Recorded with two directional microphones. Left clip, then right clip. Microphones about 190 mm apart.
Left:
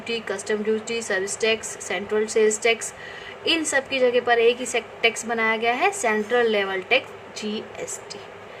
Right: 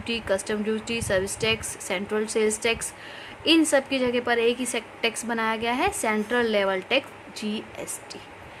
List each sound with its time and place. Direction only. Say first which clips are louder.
0.1 s a woman's voice: even; 35° right (ahead or behind)